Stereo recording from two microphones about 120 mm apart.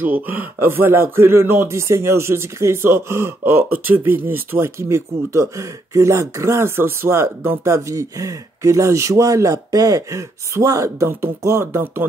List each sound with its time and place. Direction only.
0.0 s speech: 15° right (ahead or behind)